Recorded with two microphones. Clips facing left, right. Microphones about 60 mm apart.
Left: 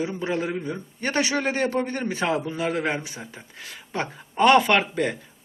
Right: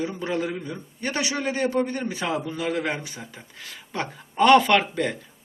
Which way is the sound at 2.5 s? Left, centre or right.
Centre.